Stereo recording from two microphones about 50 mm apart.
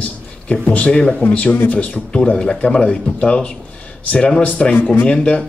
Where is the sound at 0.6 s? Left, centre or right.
Left.